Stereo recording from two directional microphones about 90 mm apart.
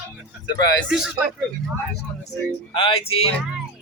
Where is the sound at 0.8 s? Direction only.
5° right (ahead or behind).